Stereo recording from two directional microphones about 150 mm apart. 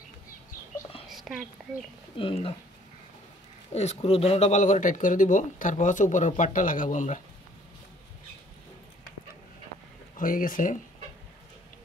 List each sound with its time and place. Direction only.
1.0 s a sound: centre (ahead or behind)
2.1 s speech: 35° left (ahead or behind)
3.7 s speech: 45° left (ahead or behind)
10.1 s speech: 65° left (ahead or behind)